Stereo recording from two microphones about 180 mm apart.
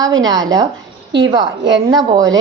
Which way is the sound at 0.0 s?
20° right (ahead or behind).